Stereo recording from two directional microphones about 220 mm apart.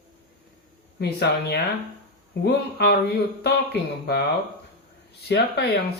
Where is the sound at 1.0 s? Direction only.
50° left (ahead or behind).